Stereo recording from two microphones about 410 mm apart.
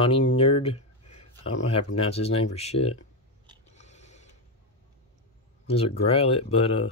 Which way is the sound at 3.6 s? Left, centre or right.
Centre.